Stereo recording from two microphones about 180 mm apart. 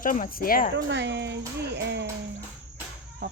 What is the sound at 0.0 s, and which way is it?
Speech, 50° left (ahead or behind).